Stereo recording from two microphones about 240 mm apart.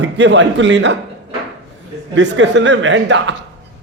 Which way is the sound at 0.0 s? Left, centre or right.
Right.